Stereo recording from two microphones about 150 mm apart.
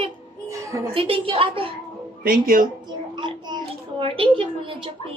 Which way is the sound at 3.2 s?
30° right (ahead or behind).